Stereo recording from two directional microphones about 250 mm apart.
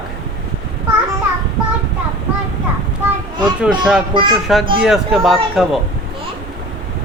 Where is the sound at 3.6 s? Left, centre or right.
Centre.